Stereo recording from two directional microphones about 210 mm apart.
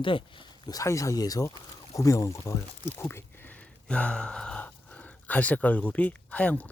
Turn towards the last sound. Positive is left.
turn(degrees=5)  # may be behind; listen again after turning